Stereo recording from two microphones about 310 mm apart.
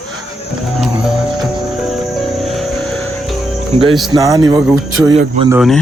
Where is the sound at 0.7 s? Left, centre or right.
Centre.